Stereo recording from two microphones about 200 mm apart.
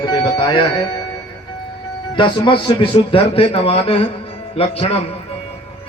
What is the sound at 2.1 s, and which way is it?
Speech, 25° left (ahead or behind).